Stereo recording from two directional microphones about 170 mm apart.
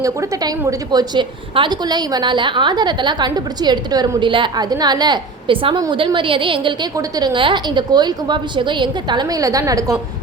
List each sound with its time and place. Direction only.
0.0 s a woman's voice: 20° right (ahead or behind)